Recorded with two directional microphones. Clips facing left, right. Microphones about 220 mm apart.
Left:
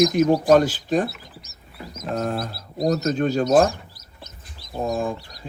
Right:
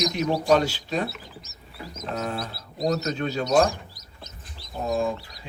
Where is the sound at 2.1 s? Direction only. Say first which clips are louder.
Left 5 dB; 45° left (ahead or behind).